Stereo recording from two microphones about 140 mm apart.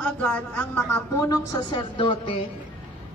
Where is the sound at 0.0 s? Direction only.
10° left (ahead or behind).